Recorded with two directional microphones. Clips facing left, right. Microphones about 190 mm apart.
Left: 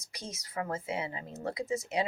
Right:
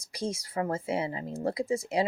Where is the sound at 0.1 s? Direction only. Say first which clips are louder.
Right 9 dB; 30° right (ahead or behind).